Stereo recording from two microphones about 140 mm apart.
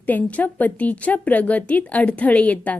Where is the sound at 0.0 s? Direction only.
10° left (ahead or behind).